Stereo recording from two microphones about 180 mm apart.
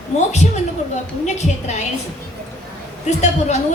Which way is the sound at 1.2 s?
40° left (ahead or behind).